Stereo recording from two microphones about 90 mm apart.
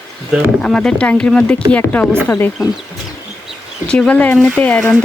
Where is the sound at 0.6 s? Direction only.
5° left (ahead or behind).